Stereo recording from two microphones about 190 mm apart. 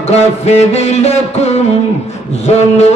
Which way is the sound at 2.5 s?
35° left (ahead or behind).